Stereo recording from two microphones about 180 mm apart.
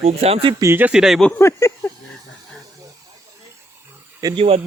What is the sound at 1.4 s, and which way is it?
Speech, 15° left (ahead or behind).